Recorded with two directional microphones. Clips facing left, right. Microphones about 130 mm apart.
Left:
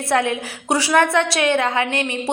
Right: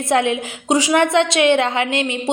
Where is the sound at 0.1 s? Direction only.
20° right (ahead or behind).